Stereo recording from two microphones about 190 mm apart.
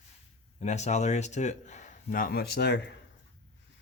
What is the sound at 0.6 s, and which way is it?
A man's voice, 35° left (ahead or behind).